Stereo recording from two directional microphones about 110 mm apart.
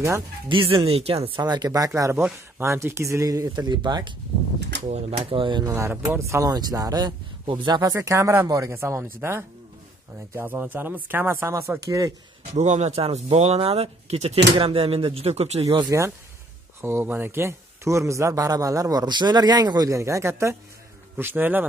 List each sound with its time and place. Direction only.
0.5 s speech: 55° right (ahead or behind)
1.4 s speech: 40° right (ahead or behind)
4.8 s speech: 75° right (ahead or behind)
5.2 s speech: 50° right (ahead or behind)
5.7 s a man's voice: 20° right (ahead or behind); by 7.9 s 40° right (ahead or behind)
7.9 s a man's voice: 30° right (ahead or behind)
12.5 s speech: 90° right; by 15.6 s 75° right (ahead or behind)
15.9 s a man's voice: 25° right (ahead or behind)